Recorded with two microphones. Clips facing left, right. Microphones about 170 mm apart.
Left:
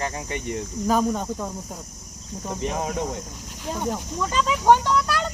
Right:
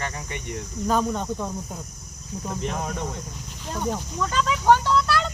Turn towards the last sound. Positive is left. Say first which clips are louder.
# right 1 dB
turn(degrees=15)  # may be behind; listen again after turning